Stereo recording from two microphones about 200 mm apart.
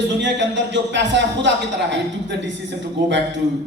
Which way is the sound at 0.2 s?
65° right (ahead or behind).